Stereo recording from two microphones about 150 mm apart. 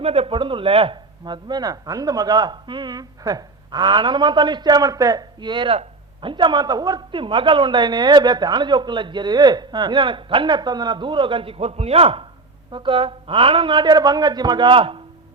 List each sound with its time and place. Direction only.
0.0 s a man's voice: 40° right (ahead or behind)